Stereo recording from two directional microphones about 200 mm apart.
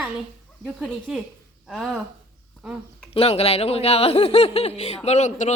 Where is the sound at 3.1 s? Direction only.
30° left (ahead or behind).